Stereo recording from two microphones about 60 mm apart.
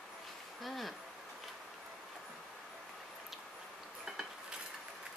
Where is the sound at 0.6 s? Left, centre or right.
Centre.